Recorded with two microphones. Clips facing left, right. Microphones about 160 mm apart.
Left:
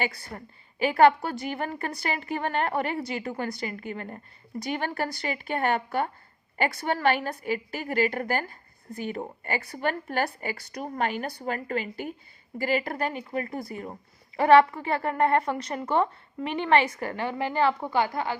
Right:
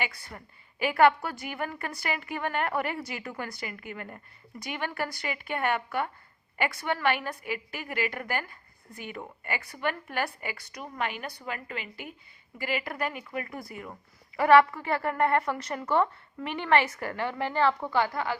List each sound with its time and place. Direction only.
0.0 s a woman's voice: 35° left (ahead or behind); by 18.3 s 20° left (ahead or behind)